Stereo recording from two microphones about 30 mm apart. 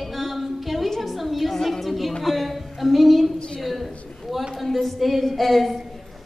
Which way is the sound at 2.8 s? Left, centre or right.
Centre.